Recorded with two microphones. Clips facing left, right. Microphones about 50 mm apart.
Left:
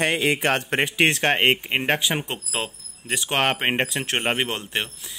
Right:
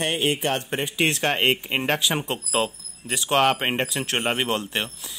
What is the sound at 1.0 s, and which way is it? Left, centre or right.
Speech, left.